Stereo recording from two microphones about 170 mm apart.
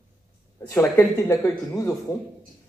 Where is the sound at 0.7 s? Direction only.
15° left (ahead or behind).